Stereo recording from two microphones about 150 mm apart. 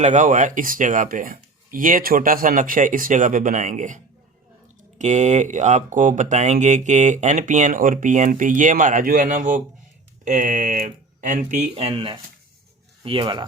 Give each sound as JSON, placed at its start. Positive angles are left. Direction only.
{"t": 0.0, "sound": "speech", "side_deg": -55}